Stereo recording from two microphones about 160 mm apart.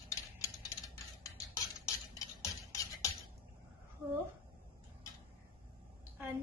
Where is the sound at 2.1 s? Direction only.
20° left (ahead or behind).